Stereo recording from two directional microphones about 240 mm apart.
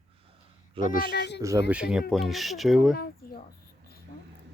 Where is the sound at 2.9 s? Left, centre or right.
Left.